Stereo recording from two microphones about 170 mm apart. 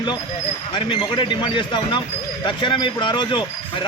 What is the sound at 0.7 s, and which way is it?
Speech, 30° left (ahead or behind).